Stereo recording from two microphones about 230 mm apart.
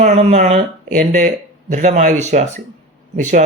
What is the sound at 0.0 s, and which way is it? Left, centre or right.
Speech, right.